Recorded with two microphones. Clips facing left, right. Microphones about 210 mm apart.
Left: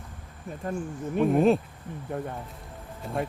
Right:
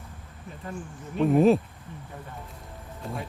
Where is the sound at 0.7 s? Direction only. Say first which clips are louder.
Left 5 dB; 45° left (ahead or behind).